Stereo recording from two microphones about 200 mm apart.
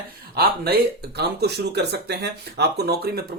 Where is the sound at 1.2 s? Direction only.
55° right (ahead or behind).